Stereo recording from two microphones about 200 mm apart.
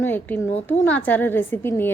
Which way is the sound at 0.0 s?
10° left (ahead or behind).